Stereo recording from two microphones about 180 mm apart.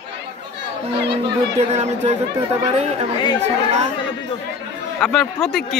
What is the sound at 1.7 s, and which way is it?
Speech, 35° right (ahead or behind).